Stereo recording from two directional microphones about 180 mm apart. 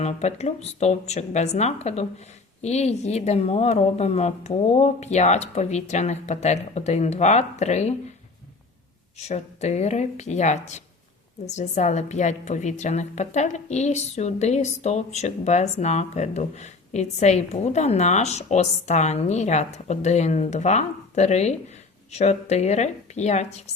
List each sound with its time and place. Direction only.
0.0 s a woman's voice: 40° left (ahead or behind)
9.3 s a woman's voice: 40° left (ahead or behind)